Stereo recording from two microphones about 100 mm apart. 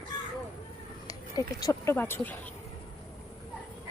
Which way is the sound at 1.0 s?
35° left (ahead or behind).